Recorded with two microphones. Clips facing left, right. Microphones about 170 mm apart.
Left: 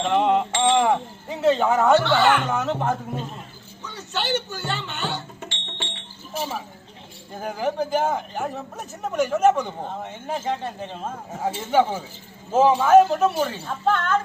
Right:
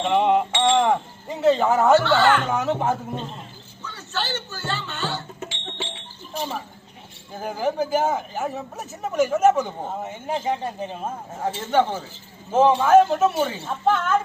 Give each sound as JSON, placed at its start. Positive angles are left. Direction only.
{"t": 0.0, "sound": "a sound", "side_deg": -5}
{"t": 2.0, "sound": "a man's voice", "side_deg": 15}
{"t": 2.5, "sound": "speech", "side_deg": -5}
{"t": 3.8, "sound": "speech", "side_deg": 15}
{"t": 5.4, "sound": "a sound", "side_deg": 0}
{"t": 7.3, "sound": "speech", "side_deg": -5}
{"t": 11.4, "sound": "a man's voice", "side_deg": 10}